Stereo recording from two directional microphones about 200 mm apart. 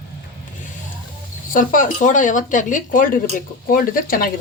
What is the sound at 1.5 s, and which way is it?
Speech, 40° left (ahead or behind).